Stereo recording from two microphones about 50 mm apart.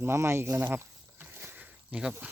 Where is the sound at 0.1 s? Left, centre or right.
Right.